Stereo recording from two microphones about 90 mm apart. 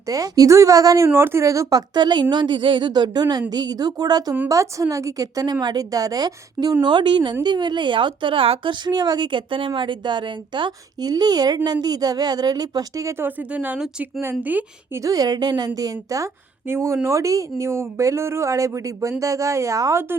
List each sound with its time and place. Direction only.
0.1 s a woman's voice: 40° right (ahead or behind)
2.0 s a woman's voice: 60° right (ahead or behind)
6.8 s speech: 60° right (ahead or behind); by 13.1 s 45° right (ahead or behind)
13.1 s speech: 20° right (ahead or behind)
15.0 s a woman's voice: 45° right (ahead or behind)